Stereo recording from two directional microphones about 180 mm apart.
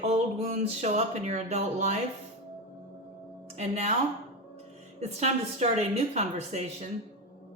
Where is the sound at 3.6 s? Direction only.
35° right (ahead or behind).